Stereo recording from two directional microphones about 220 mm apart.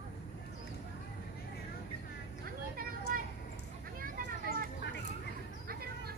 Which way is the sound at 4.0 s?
40° right (ahead or behind).